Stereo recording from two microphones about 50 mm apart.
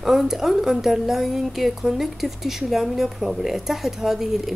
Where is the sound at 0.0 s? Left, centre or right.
Centre.